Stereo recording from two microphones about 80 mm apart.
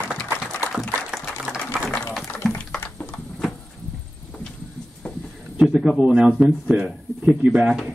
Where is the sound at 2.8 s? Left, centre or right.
Centre.